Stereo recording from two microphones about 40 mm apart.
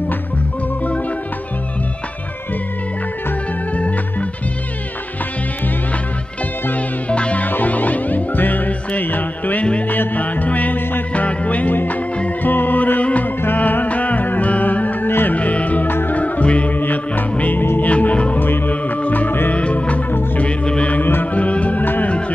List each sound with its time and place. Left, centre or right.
3.7 s music: left
7.1 s music: left
7.4 s music: left
11.7 s music: left
13.0 s music: left
15.0 s music: left
15.3 s music: left
16.7 s music: left
19.5 s music: left
21.0 s music: left
21.3 s music: left
21.8 s music: left